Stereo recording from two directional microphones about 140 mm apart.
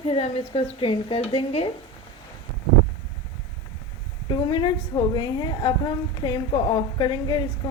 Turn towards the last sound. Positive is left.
turn(degrees=35)  # may be behind; listen again after turning